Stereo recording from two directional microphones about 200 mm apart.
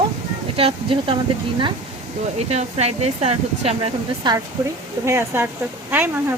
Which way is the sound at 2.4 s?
30° right (ahead or behind).